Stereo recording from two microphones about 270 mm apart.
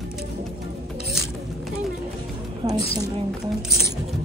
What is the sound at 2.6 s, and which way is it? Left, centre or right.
Speech, centre.